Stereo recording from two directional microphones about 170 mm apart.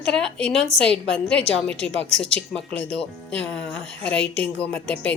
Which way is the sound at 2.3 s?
35° right (ahead or behind).